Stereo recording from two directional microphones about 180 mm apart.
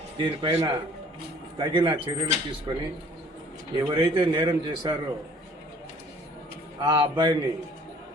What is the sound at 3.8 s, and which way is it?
A man's voice, 25° right (ahead or behind).